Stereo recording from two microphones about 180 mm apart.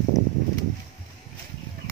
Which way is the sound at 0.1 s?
20° left (ahead or behind).